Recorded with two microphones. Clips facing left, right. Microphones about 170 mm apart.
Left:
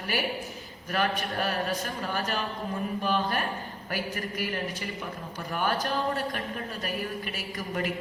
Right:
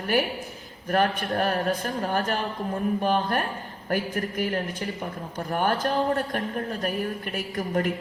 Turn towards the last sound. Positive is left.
turn(degrees=-50)  # may be behind; listen again after turning